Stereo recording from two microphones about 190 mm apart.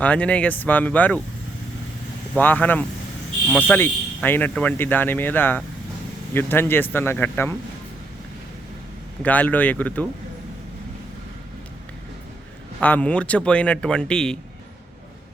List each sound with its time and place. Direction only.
0.0 s speech: 5° left (ahead or behind)
2.3 s speech: 10° left (ahead or behind)
9.2 s speech: 10° left (ahead or behind)
12.8 s speech: 10° left (ahead or behind)